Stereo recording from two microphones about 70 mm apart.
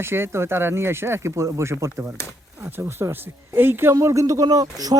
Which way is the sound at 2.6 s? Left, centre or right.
Right.